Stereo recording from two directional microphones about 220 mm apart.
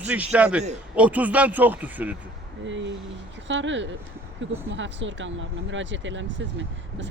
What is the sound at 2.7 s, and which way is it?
Speech, 55° right (ahead or behind).